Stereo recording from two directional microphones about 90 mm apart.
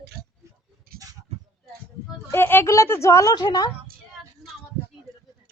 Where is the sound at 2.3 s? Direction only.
25° left (ahead or behind); by 3.7 s 50° left (ahead or behind).